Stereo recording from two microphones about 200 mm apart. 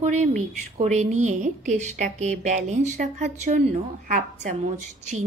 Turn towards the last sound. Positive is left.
turn(degrees=-35)  # may be behind; listen again after turning